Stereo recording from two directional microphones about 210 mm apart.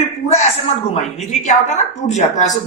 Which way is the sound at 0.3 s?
30° left (ahead or behind).